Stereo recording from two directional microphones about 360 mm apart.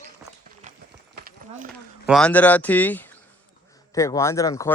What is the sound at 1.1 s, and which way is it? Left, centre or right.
Clip-clop, right.